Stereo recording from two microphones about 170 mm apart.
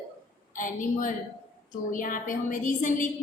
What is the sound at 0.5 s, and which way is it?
A woman's voice, 50° left (ahead or behind).